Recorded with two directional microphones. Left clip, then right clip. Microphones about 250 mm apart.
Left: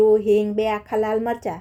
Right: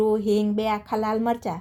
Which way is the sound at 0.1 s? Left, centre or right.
Centre.